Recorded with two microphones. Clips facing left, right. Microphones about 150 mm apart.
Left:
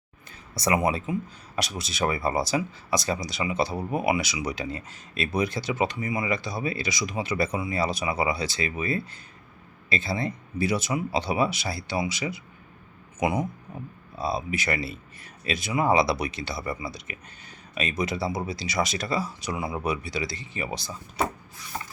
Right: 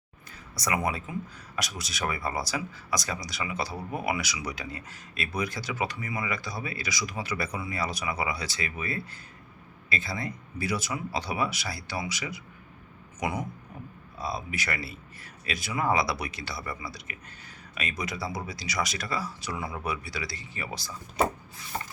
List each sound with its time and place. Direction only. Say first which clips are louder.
0.5 s a man's voice: left 5 dB; 25° left (ahead or behind)